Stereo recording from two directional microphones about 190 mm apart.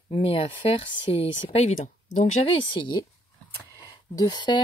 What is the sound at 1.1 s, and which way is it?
Speech, 30° left (ahead or behind).